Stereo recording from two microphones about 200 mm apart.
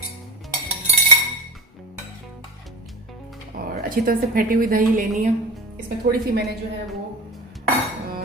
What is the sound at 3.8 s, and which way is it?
Speech, 45° right (ahead or behind).